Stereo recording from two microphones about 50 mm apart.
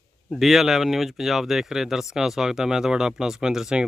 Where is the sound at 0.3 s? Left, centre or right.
Centre.